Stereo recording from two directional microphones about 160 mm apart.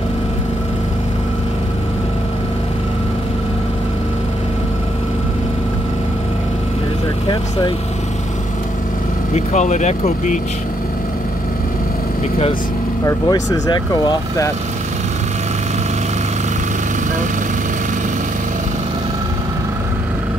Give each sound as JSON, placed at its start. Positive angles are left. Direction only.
{"t": 9.3, "sound": "speech", "side_deg": 45}
{"t": 13.0, "sound": "speech", "side_deg": 25}